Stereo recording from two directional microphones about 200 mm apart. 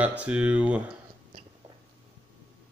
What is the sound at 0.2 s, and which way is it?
Speech, 5° right (ahead or behind).